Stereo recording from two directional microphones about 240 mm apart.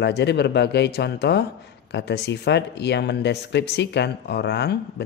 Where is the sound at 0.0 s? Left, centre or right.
Left.